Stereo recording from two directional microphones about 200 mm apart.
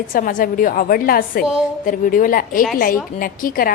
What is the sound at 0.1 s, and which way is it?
A woman's voice, 45° left (ahead or behind).